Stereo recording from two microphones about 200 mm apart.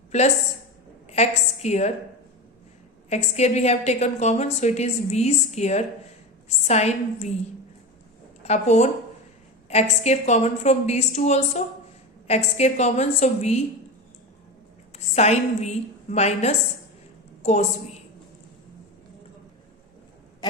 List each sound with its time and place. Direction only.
0.1 s a woman's voice: 35° left (ahead or behind)
3.1 s a woman's voice: 35° left (ahead or behind)
8.4 s a woman's voice: 35° left (ahead or behind)
10.0 s a woman's voice: 35° left (ahead or behind)
14.9 s a woman's voice: 35° left (ahead or behind)